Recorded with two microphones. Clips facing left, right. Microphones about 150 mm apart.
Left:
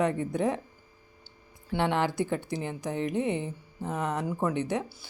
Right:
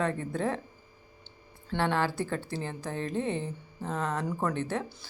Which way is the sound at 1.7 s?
20° left (ahead or behind).